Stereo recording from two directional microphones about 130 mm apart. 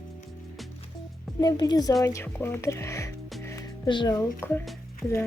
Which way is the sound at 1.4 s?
30° left (ahead or behind).